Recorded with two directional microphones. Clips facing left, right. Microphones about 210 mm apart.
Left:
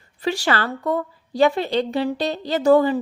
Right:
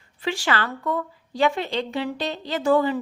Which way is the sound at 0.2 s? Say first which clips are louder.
Left 3 dB; 40° left (ahead or behind).